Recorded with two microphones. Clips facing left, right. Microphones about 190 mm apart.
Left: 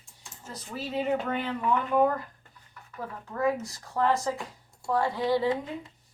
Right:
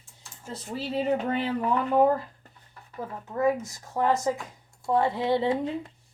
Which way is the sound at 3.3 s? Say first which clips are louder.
Right 3 dB; 20° right (ahead or behind).